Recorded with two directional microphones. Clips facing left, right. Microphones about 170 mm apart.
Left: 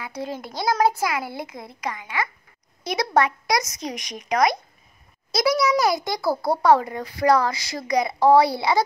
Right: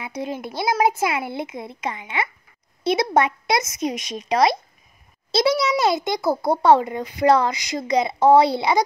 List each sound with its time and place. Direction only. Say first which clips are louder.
0.0 s a child's voice: right 2 dB; 20° right (ahead or behind)